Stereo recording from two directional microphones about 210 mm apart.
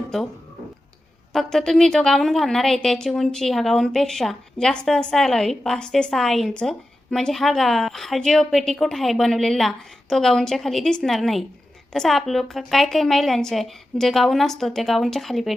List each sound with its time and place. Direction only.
1.3 s a woman's voice: centre (ahead or behind)